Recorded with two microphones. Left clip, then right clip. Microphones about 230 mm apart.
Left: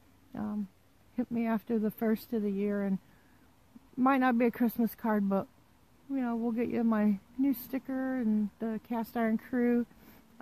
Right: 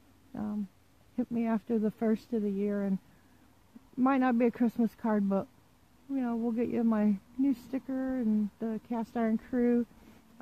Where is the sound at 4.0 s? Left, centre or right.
Centre.